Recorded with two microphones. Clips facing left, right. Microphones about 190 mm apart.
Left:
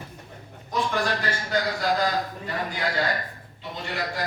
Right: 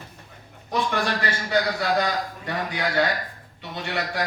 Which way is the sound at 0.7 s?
65° right (ahead or behind).